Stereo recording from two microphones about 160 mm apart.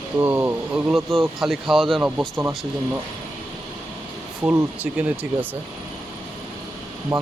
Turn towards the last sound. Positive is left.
turn(degrees=-20)  # may be behind; listen again after turning